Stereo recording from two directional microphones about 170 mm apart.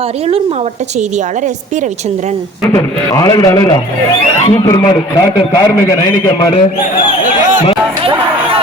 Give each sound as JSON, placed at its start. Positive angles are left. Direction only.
{"t": 2.7, "sound": "a man's voice", "side_deg": 20}